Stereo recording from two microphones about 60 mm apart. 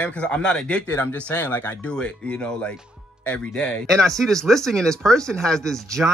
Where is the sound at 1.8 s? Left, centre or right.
Centre.